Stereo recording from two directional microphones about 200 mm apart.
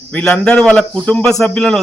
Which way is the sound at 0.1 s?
5° left (ahead or behind).